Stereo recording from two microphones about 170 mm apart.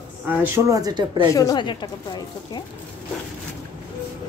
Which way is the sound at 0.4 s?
20° right (ahead or behind).